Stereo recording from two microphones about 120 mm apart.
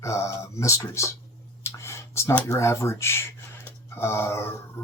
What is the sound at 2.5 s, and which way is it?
Speech, 25° left (ahead or behind).